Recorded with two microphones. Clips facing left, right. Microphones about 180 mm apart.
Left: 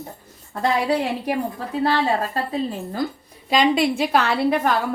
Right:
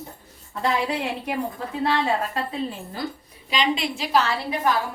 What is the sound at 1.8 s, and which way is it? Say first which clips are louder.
Speech: left 3 dB; 35° left (ahead or behind).